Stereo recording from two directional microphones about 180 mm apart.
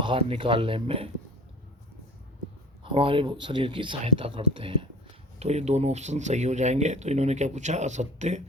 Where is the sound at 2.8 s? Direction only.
30° right (ahead or behind).